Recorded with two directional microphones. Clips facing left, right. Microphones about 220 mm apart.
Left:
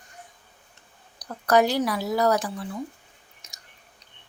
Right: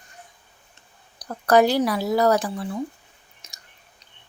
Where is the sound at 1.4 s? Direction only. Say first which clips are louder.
Right 3 dB; 30° right (ahead or behind).